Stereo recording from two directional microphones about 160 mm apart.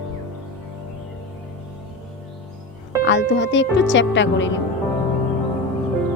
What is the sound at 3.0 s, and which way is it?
Speech, 90° left.